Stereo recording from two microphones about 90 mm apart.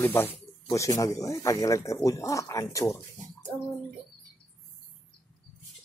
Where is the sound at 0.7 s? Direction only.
35° left (ahead or behind).